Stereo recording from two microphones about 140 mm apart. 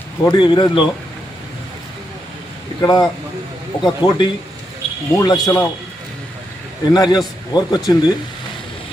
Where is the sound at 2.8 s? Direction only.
30° left (ahead or behind).